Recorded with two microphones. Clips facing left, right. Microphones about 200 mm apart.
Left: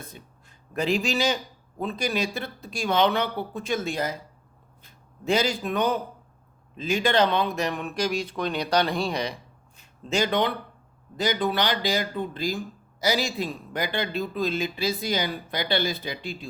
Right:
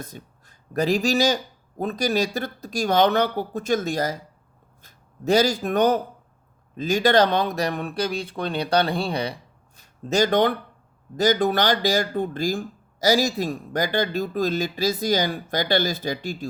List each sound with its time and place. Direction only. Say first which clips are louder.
0.0 s a man's voice: right 5 dB; 40° right (ahead or behind)